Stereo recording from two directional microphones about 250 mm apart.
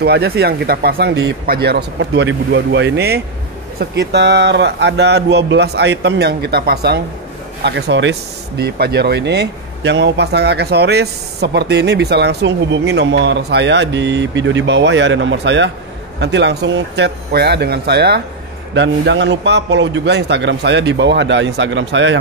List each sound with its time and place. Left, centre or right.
0.0 s speech: right